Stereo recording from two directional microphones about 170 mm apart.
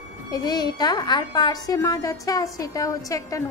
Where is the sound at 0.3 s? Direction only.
25° left (ahead or behind).